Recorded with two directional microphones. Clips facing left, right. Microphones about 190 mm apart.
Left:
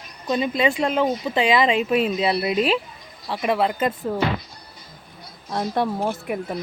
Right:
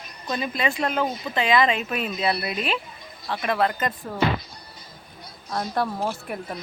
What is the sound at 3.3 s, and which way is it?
Speech, 5° left (ahead or behind).